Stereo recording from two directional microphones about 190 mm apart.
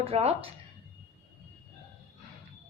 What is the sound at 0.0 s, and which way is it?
Speech, 30° right (ahead or behind).